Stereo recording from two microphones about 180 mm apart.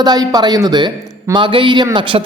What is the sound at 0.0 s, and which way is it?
Speech, 20° right (ahead or behind).